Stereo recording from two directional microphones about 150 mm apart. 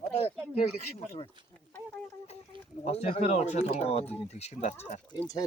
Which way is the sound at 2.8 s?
45° left (ahead or behind).